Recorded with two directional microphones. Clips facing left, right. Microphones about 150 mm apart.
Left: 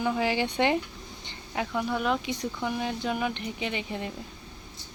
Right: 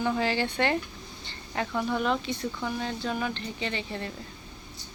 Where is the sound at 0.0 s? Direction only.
10° left (ahead or behind).